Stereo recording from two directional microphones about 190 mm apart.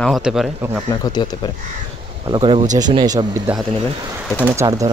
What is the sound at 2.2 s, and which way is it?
Speech, 25° right (ahead or behind).